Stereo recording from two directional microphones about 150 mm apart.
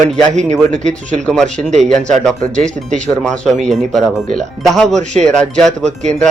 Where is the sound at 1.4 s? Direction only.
50° right (ahead or behind).